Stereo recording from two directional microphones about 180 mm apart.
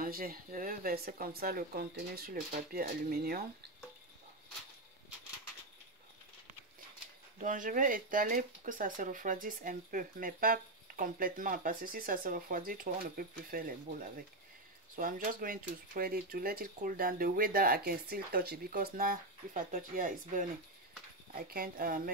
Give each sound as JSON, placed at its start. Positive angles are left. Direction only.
{"t": 0.0, "sound": "speech", "side_deg": -55}
{"t": 7.3, "sound": "speech", "side_deg": -45}